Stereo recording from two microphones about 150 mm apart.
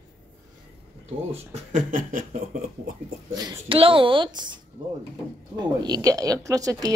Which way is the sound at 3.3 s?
25° right (ahead or behind).